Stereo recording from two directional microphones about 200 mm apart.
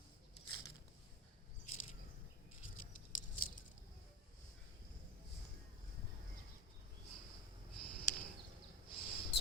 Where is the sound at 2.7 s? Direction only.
85° left.